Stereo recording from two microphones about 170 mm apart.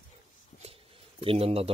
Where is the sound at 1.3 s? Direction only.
35° right (ahead or behind).